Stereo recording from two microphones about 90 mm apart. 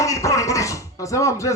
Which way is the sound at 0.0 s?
35° left (ahead or behind).